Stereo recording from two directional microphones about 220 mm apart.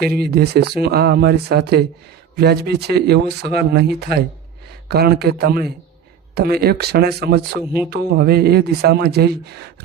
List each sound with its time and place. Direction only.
0.0 s speech: 45° right (ahead or behind)